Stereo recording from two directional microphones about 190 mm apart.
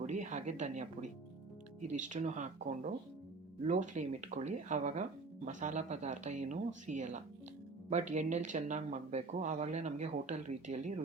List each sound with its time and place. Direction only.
0.0 s speech: 40° right (ahead or behind)
1.9 s speech: 40° right (ahead or behind)